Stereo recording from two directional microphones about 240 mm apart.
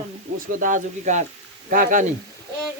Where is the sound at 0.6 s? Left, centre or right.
Right.